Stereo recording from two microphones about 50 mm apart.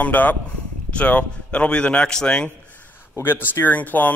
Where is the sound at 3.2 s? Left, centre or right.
Left.